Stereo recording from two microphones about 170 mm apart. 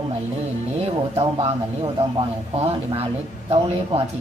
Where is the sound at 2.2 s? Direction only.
35° right (ahead or behind).